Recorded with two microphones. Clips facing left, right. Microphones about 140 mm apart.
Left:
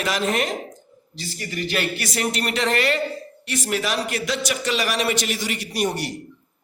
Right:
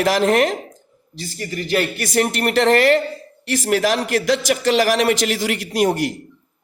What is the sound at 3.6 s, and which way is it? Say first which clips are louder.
A man's voice: right 6 dB; 85° right.